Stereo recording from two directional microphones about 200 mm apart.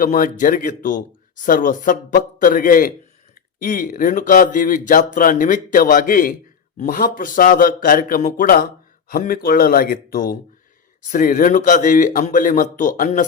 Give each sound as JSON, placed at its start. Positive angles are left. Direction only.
{"t": 0.0, "sound": "speech", "side_deg": 40}